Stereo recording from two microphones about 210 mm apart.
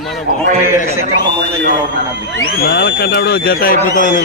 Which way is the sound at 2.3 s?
45° left (ahead or behind).